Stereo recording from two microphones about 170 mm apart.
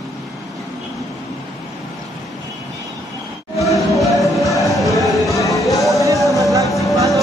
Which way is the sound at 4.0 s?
Centre (ahead or behind).